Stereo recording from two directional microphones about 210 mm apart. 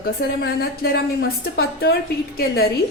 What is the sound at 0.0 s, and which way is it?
A woman's voice, 50° left (ahead or behind).